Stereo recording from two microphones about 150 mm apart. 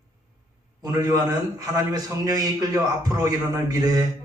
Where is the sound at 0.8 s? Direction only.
25° right (ahead or behind).